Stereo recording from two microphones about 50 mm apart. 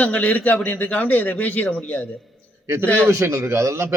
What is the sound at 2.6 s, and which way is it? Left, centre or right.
A man's voice, right.